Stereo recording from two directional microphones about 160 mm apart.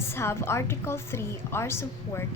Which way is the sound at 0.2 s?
15° left (ahead or behind).